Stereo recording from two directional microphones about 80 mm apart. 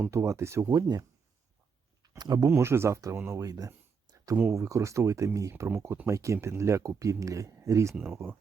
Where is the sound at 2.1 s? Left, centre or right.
Right.